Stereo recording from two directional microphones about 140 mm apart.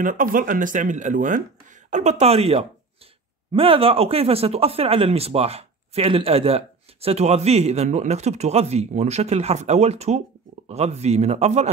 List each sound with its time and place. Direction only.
0.0 s speech: 75° right (ahead or behind); by 11.7 s 50° right (ahead or behind)